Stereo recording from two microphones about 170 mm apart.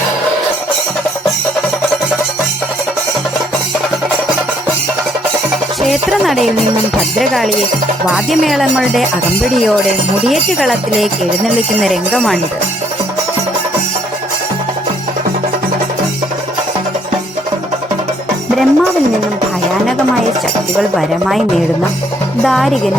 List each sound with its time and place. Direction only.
5.8 s music: centre (ahead or behind)
7.2 s speech: centre (ahead or behind)
10.2 s speech: centre (ahead or behind)
18.5 s music: centre (ahead or behind)
20.7 s speech: centre (ahead or behind)